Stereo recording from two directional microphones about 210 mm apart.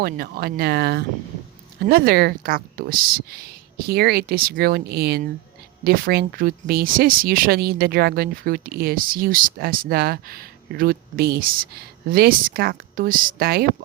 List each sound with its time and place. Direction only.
0.0 s speech: 45° right (ahead or behind)